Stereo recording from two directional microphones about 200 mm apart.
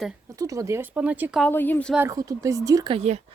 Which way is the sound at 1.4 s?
10° left (ahead or behind).